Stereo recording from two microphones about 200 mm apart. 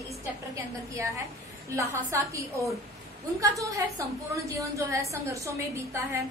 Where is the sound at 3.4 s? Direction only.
15° right (ahead or behind).